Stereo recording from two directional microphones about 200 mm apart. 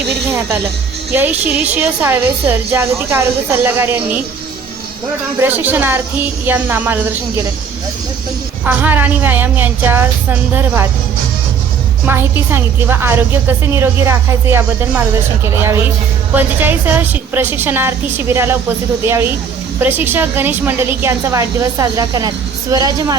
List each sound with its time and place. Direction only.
1.1 s a woman's voice: 10° right (ahead or behind)
5.4 s a woman's voice: 10° right (ahead or behind)
8.6 s a woman's voice: 10° right (ahead or behind)
12.0 s a woman's voice: 10° right (ahead or behind)
19.8 s a woman's voice: 10° right (ahead or behind)